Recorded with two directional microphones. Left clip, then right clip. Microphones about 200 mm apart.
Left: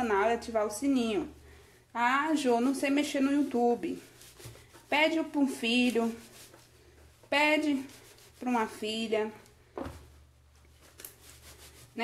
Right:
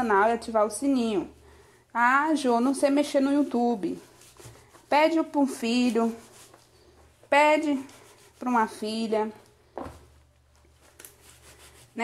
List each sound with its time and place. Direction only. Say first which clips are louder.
0.0 s a sound: right 5 dB; 30° right (ahead or behind)
0.5 s speech: right 5 dB; 25° right (ahead or behind)
7.2 s speech: right 6 dB; 25° right (ahead or behind)